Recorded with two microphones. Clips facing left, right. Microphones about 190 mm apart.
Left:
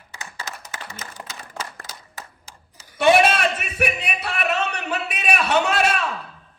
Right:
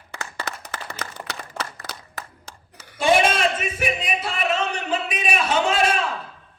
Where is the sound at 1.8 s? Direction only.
60° right (ahead or behind).